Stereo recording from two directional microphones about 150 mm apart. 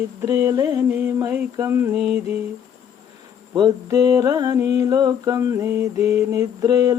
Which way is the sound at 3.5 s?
25° right (ahead or behind).